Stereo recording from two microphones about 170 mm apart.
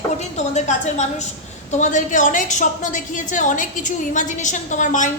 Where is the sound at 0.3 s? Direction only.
45° left (ahead or behind).